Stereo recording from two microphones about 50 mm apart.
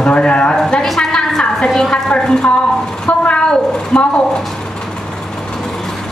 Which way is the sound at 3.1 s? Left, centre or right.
Left.